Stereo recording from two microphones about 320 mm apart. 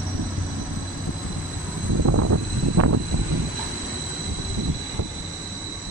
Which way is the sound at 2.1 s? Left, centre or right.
Right.